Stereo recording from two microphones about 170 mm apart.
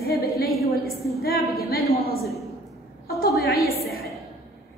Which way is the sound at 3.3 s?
Centre (ahead or behind).